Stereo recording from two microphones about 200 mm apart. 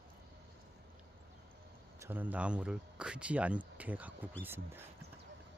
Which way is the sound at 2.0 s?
10° right (ahead or behind).